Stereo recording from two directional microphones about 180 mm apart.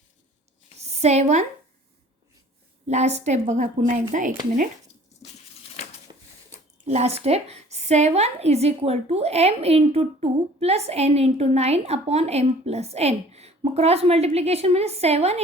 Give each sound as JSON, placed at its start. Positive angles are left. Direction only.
{"t": 0.9, "sound": "a woman's voice", "side_deg": -35}
{"t": 2.8, "sound": "a woman's voice", "side_deg": -40}
{"t": 6.1, "sound": "a sound", "side_deg": -30}
{"t": 6.8, "sound": "a woman's voice", "side_deg": -35}